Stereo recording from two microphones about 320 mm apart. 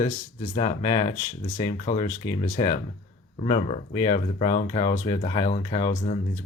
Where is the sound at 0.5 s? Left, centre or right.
Centre.